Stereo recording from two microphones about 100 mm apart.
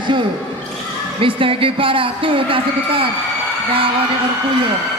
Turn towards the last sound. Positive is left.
turn(degrees=-65)  # may be behind; listen again after turning